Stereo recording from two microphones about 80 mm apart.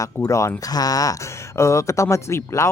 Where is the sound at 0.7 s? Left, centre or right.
Left.